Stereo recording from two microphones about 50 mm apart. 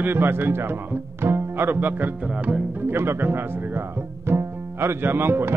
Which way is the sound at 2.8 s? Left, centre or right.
Right.